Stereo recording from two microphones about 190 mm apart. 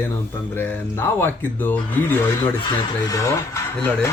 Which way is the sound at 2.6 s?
15° left (ahead or behind).